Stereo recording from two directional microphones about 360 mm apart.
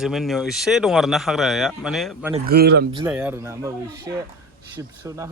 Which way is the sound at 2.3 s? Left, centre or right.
Right.